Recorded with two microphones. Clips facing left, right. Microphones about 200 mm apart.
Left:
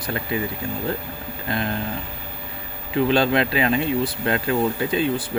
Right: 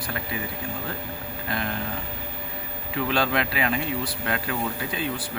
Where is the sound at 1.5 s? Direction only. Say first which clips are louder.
Left 5 dB; 25° left (ahead or behind).